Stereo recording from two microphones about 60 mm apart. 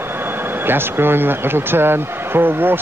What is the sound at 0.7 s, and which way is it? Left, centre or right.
Speech, right.